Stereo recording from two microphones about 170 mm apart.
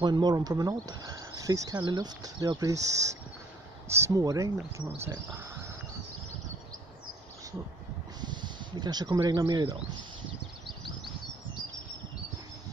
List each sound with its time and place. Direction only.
0.0 s speech: 25° right (ahead or behind)
8.2 s speech: 25° right (ahead or behind)